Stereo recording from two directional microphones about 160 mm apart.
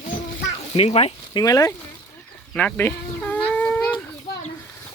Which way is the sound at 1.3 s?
25° left (ahead or behind).